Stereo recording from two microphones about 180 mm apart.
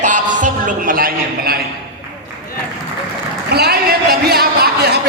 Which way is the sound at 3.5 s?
60° right (ahead or behind).